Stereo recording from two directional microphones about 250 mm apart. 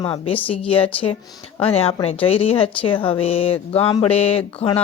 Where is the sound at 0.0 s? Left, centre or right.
Left.